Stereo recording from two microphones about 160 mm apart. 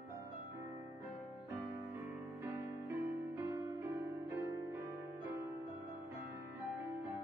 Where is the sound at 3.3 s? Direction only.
15° right (ahead or behind).